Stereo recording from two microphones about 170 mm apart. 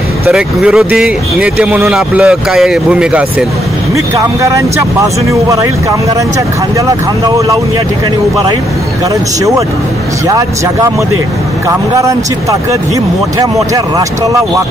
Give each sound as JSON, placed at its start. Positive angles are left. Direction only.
{"t": 0.3, "sound": "speech", "side_deg": -5}
{"t": 3.9, "sound": "speech", "side_deg": -20}
{"t": 7.2, "sound": "speech", "side_deg": -20}
{"t": 10.2, "sound": "speech", "side_deg": -20}
{"t": 12.0, "sound": "speech", "side_deg": -20}